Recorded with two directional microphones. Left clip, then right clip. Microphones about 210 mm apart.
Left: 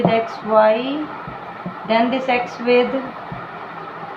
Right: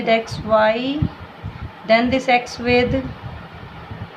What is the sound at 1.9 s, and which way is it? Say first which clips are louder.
Speech: right 2 dB; 65° right (ahead or behind).